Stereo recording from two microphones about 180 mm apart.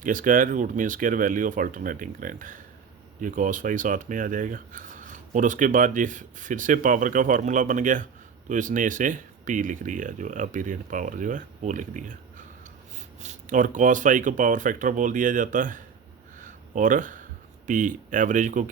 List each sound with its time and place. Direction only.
0.0 s speech: 45° right (ahead or behind)
13.2 s speech: 45° right (ahead or behind)
16.4 s a sound: 45° right (ahead or behind)
17.7 s speech: 45° right (ahead or behind)